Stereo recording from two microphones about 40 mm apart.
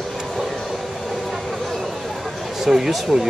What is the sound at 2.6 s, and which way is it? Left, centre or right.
Speech, centre.